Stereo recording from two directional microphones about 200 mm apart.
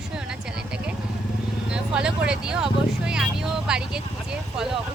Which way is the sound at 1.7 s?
5° right (ahead or behind).